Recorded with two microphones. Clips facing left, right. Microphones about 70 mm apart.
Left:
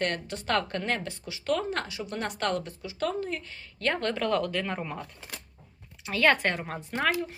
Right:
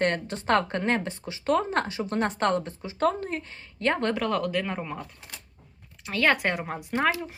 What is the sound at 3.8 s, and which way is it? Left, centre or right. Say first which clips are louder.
Speech: right 3 dB; right.